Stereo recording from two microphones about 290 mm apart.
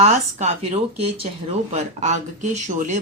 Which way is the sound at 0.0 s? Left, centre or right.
Right.